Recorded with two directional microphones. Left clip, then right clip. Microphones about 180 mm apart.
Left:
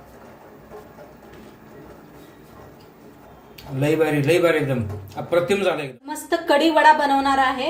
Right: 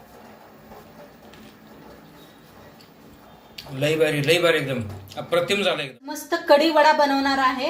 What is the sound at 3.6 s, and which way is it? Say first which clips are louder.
A man's voice: left 1 dB; 45° left (ahead or behind).